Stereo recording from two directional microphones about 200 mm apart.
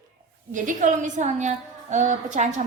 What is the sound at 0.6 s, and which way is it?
A woman's voice, 40° right (ahead or behind).